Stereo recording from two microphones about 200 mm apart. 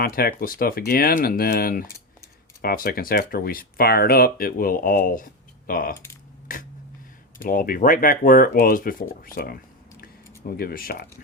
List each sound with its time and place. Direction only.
0.0 s speech: 45° left (ahead or behind)
6.5 s a sound: 45° left (ahead or behind)
7.4 s speech: 45° left (ahead or behind)
10.6 s speech: 45° left (ahead or behind)